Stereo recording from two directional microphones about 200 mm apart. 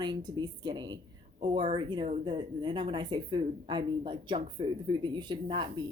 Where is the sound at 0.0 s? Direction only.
20° right (ahead or behind).